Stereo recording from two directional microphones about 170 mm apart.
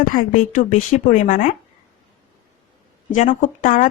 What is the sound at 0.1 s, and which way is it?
A woman's voice, 55° left (ahead or behind).